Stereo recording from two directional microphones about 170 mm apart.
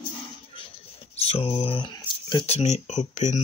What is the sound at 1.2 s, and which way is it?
Speech, 35° left (ahead or behind).